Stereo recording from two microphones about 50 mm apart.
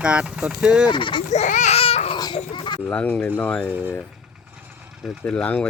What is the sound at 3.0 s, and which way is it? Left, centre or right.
Speech, left.